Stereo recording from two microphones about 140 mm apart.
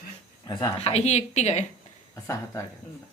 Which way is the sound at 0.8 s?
50° left (ahead or behind).